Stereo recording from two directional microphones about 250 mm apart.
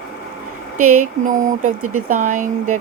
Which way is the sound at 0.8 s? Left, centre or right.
Right.